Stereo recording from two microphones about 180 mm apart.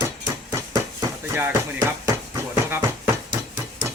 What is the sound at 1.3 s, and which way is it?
Sanding, 10° right (ahead or behind).